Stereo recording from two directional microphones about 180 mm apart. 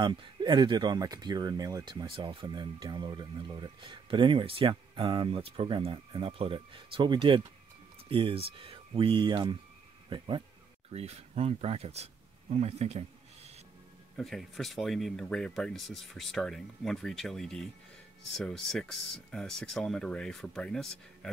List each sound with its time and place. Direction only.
0.0 s speech: 25° right (ahead or behind)
14.1 s speech: centre (ahead or behind)